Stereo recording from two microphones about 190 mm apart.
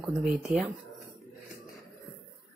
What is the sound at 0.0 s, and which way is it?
Speech, centre (ahead or behind).